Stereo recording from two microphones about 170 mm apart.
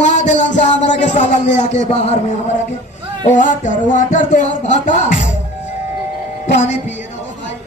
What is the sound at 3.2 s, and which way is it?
Speech, 50° left (ahead or behind).